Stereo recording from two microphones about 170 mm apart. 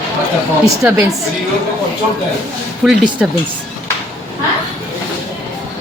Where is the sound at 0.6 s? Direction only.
15° right (ahead or behind).